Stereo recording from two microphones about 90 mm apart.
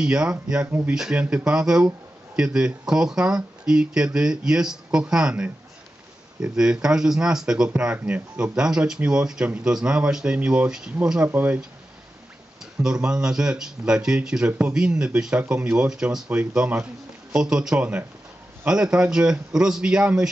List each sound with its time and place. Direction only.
0.0 s speech: 10° right (ahead or behind)
0.7 s speech: 25° right (ahead or behind)
0.9 s speech: 10° right (ahead or behind)
12.8 s speech: 10° right (ahead or behind)